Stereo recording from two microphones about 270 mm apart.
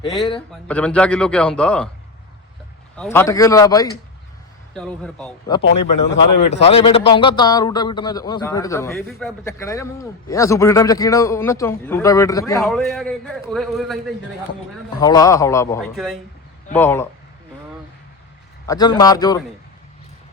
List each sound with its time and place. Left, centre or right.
0.0 s a man's voice: centre
0.7 s a man's voice: centre
2.9 s a man's voice: centre
4.7 s a man's voice: centre
6.4 s a man's voice: left; by 9.5 s centre
9.5 s a man's voice: centre
12.5 s a man's voice: centre
15.0 s a man's voice: centre
16.0 s a man's voice: centre
18.7 s a man's voice: centre